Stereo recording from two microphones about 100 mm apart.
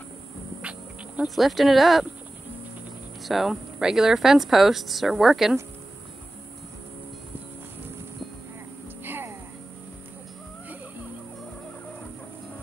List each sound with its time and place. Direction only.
0.6 s a sound: 10° right (ahead or behind)
1.2 s speech: centre (ahead or behind)
3.3 s speech: centre (ahead or behind)
9.0 s music: 20° right (ahead or behind)